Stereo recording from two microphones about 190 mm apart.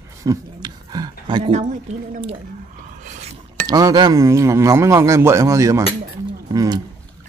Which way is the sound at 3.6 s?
20° right (ahead or behind).